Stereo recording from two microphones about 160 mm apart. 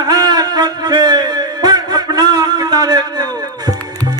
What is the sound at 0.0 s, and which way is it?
Music, 25° right (ahead or behind).